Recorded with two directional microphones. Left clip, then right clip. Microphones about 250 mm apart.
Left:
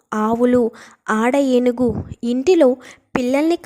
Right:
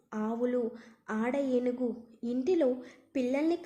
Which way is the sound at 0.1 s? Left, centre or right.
Left.